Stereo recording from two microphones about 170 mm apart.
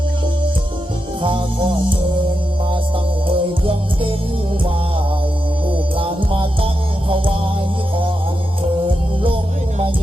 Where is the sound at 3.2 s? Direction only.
30° right (ahead or behind).